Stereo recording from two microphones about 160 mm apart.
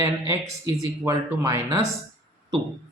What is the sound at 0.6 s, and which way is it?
Speech, 20° right (ahead or behind).